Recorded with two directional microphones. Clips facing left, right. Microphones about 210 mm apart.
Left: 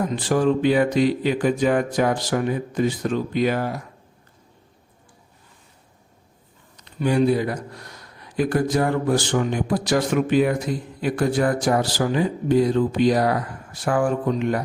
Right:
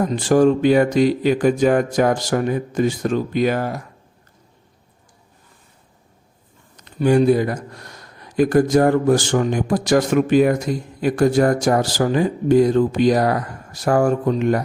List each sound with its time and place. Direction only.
0.0 s speech: 45° right (ahead or behind)
6.7 s speech: 45° right (ahead or behind)